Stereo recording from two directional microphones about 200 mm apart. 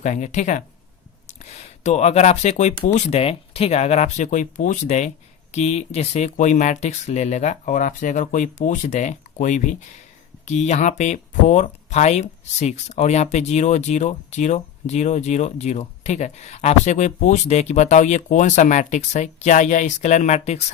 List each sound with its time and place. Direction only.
0.0 s speech: 35° left (ahead or behind)